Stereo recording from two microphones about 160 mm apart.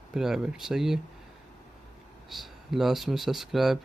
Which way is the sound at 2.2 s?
Centre (ahead or behind).